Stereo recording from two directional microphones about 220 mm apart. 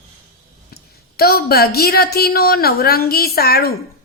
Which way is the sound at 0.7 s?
45° left (ahead or behind).